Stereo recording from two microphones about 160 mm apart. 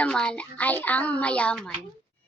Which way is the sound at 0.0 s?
5° left (ahead or behind).